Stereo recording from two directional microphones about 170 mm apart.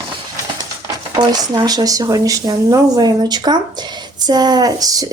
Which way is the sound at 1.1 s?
25° right (ahead or behind).